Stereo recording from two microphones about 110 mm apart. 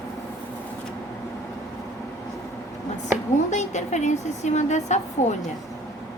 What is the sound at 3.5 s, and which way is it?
A woman's voice, 90° left.